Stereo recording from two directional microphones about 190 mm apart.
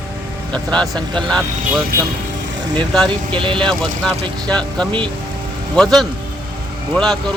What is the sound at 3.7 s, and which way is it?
Speech, 5° left (ahead or behind).